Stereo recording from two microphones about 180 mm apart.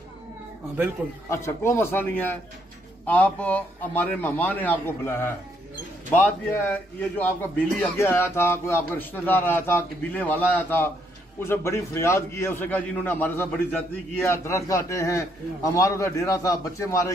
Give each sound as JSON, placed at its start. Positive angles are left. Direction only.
{"t": 1.0, "sound": "a man's voice", "side_deg": -5}
{"t": 1.3, "sound": "a man's voice", "side_deg": 15}